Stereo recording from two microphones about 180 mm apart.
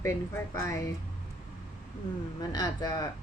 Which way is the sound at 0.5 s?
15° left (ahead or behind).